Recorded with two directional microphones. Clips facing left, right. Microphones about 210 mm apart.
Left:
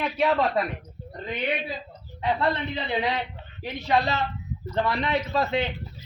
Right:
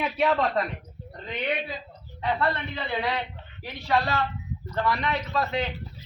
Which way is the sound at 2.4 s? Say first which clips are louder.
Left 2 dB; 20° left (ahead or behind).